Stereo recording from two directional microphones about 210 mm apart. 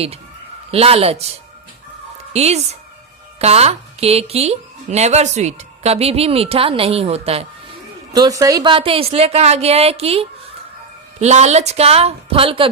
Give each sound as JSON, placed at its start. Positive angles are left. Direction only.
{"t": 0.7, "sound": "a woman's voice", "side_deg": -30}
{"t": 2.3, "sound": "a woman's voice", "side_deg": -30}
{"t": 8.1, "sound": "a woman's voice", "side_deg": -20}